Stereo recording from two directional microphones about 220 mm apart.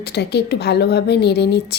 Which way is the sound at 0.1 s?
50° left (ahead or behind).